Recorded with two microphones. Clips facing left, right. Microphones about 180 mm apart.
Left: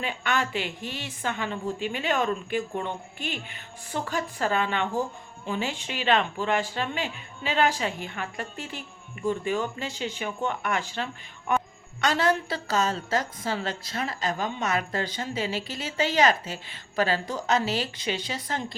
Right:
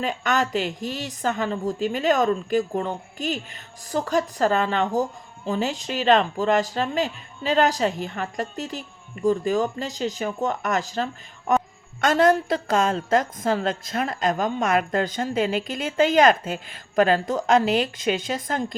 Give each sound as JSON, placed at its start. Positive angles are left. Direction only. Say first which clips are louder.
{"t": 0.0, "sound": "a woman's voice", "louder": "right 5 dB", "side_deg": -40}